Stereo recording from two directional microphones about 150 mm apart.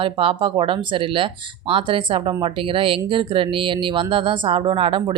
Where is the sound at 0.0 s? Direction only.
35° right (ahead or behind).